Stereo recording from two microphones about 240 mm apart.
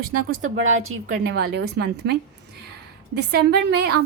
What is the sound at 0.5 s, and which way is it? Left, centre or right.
A woman's voice, right.